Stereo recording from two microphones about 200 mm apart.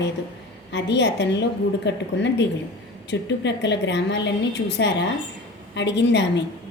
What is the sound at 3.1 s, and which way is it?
A woman's voice, 60° left (ahead or behind).